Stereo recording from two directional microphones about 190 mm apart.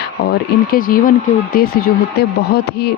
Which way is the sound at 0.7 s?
45° left (ahead or behind).